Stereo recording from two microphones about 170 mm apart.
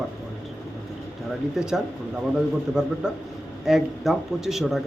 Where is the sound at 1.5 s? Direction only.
5° right (ahead or behind).